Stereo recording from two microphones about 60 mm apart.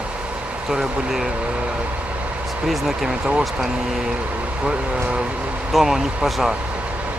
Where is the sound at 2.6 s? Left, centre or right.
Centre.